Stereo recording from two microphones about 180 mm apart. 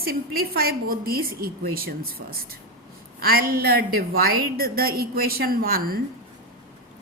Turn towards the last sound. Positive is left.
turn(degrees=-55)  # may be behind; listen again after turning